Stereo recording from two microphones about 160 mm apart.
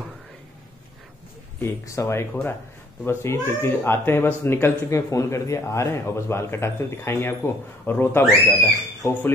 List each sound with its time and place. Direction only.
1.6 s speech: 15° left (ahead or behind)